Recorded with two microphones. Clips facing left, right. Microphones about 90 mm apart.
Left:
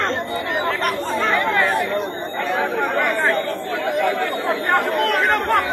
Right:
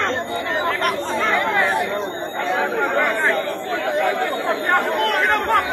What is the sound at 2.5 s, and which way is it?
Chatter, 20° right (ahead or behind).